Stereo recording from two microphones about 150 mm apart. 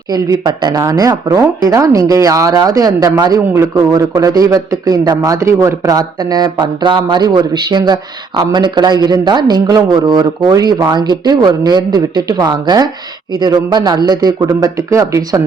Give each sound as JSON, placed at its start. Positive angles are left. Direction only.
{"t": 0.1, "sound": "speech", "side_deg": -25}